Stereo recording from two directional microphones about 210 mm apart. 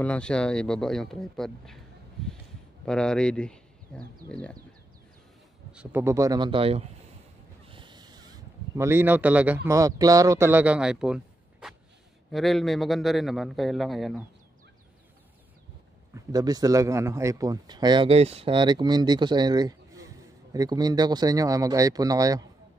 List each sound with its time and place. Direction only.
0.0 s a man's voice: 5° left (ahead or behind)
5.7 s speech: 5° right (ahead or behind); by 6.8 s 25° right (ahead or behind)
7.7 s a sound: 20° right (ahead or behind)
9.7 s a man's voice: 15° right (ahead or behind); by 14.2 s centre (ahead or behind)
16.3 s speech: 15° right (ahead or behind)